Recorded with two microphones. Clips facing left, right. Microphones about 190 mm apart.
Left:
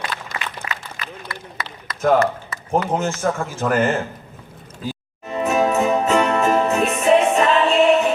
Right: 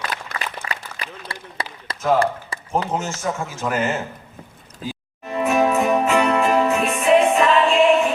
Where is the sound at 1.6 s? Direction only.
30° right (ahead or behind).